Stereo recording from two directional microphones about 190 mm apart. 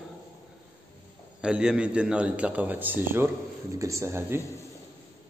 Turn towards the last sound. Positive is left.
turn(degrees=-15)  # may be behind; listen again after turning